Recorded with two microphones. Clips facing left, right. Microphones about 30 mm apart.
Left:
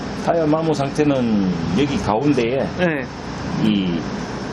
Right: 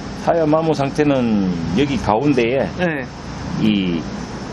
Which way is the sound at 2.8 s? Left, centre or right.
Centre.